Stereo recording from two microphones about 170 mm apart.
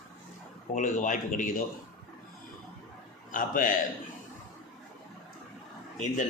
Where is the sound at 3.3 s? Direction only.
50° left (ahead or behind).